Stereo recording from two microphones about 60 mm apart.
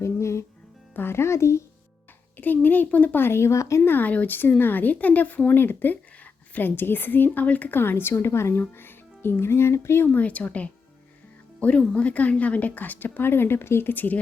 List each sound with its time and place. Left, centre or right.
0.0 s music: left
0.9 s speech: left
2.4 s speech: left
3.8 s a woman's voice: left
8.1 s speech: left
10.1 s a woman's voice: left